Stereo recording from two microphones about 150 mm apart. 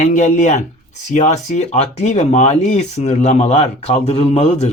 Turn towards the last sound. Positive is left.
turn(degrees=45)  # may be behind; listen again after turning